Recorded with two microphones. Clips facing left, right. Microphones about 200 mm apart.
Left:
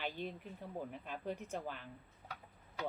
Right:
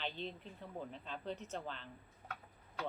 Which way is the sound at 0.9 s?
10° left (ahead or behind).